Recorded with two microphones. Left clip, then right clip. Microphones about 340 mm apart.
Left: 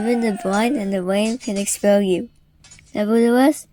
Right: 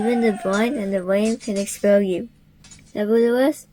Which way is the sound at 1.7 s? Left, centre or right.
Left.